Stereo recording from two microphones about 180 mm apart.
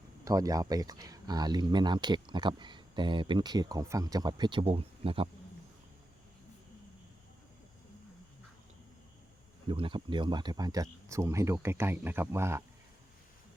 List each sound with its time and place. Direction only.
0.3 s speech: 20° right (ahead or behind)
9.6 s speech: 30° right (ahead or behind)